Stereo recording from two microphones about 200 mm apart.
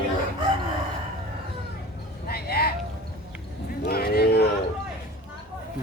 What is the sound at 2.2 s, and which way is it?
Vehicle, 50° left (ahead or behind).